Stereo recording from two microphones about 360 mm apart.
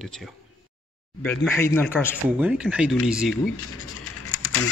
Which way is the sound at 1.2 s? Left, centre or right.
Centre.